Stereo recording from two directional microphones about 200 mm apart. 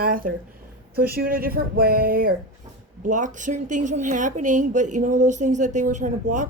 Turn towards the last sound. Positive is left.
turn(degrees=-40)  # may be behind; listen again after turning